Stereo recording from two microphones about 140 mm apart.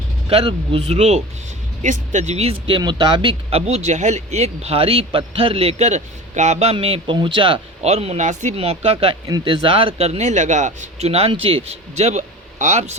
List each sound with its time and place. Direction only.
0.3 s speech: 45° right (ahead or behind); by 8.5 s 60° right (ahead or behind)
8.5 s speech: 45° right (ahead or behind)
9.2 s speech: 30° right (ahead or behind); by 13.0 s 55° right (ahead or behind)